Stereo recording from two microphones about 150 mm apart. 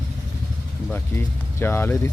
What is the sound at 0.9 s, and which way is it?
Speech, 15° left (ahead or behind).